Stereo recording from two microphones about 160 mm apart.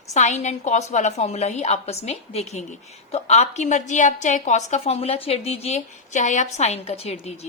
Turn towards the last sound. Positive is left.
turn(degrees=40)  # may be behind; listen again after turning